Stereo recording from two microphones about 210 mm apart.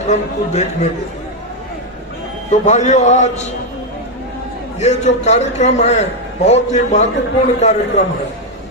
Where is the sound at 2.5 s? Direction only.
35° left (ahead or behind).